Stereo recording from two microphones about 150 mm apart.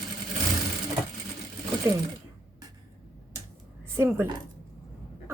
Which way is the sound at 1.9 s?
25° right (ahead or behind).